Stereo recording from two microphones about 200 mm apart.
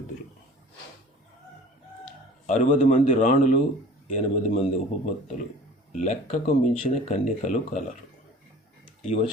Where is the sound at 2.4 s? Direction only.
40° left (ahead or behind).